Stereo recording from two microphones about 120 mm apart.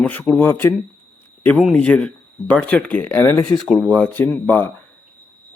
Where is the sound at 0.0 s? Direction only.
15° left (ahead or behind).